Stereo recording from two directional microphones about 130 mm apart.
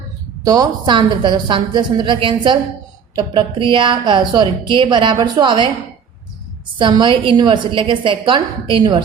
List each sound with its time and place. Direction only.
0.4 s a woman's voice: 30° right (ahead or behind)
6.7 s a woman's voice: 40° right (ahead or behind)